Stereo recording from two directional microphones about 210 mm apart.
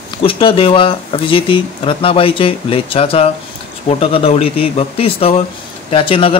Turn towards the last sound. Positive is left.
turn(degrees=25)  # may be behind; listen again after turning